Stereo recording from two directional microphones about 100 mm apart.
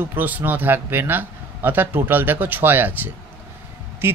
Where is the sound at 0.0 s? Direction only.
20° right (ahead or behind).